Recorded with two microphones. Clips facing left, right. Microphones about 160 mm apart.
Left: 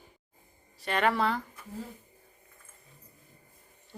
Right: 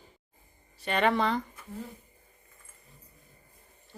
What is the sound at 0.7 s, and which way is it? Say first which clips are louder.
Speech: right 1 dB; centre (ahead or behind).